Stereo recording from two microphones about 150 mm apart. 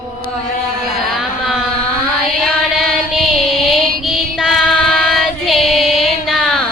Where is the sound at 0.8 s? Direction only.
5° right (ahead or behind).